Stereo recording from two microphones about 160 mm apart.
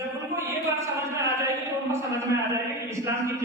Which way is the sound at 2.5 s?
20° right (ahead or behind).